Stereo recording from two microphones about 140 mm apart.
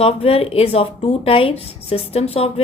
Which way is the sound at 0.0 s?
45° left (ahead or behind).